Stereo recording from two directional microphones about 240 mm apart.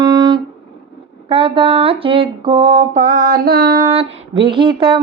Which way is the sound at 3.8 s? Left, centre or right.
Right.